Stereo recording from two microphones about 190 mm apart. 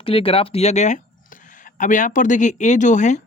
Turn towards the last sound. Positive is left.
turn(degrees=40)  # may be behind; listen again after turning